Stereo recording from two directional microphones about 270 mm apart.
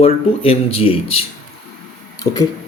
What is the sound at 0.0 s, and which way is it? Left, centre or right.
Speech, left.